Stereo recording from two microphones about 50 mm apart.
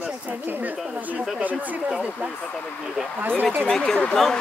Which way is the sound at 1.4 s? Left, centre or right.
Right.